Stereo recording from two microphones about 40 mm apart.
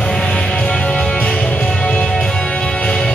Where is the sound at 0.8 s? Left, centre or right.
Left.